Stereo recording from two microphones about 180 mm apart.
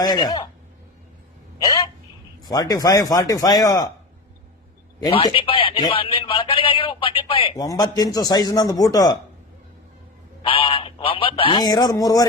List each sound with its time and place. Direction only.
0.0 s a man's voice: 20° left (ahead or behind)
1.6 s a sound: 20° left (ahead or behind)
2.4 s a man's voice: 20° left (ahead or behind)
4.9 s a man's voice: 25° left (ahead or behind)
10.4 s a man's voice: 30° left (ahead or behind)